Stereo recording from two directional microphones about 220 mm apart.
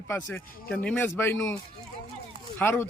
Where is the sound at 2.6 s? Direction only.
10° left (ahead or behind).